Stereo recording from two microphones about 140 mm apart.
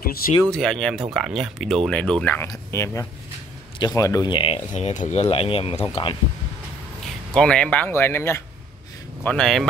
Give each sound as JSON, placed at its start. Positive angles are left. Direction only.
{"t": 0.5, "sound": "speech", "side_deg": 5}
{"t": 4.7, "sound": "speech", "side_deg": 60}
{"t": 7.3, "sound": "speech", "side_deg": 5}
{"t": 9.2, "sound": "speech", "side_deg": 5}